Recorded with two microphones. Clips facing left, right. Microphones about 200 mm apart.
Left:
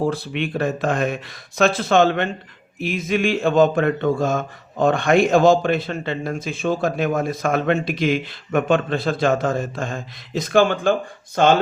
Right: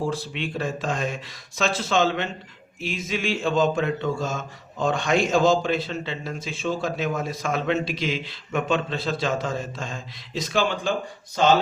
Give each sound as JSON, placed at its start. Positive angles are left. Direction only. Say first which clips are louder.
{"t": 0.0, "sound": "speech", "louder": "left 5 dB", "side_deg": 60}